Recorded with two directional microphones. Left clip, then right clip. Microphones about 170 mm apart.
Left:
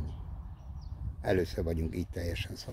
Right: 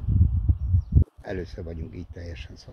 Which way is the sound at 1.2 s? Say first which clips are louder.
Left 4 dB; 30° left (ahead or behind).